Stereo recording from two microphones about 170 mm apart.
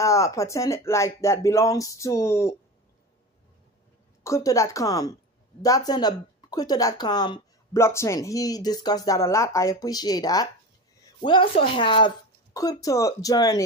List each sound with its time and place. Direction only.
0.0 s speech: 20° left (ahead or behind)
4.2 s speech: 20° left (ahead or behind)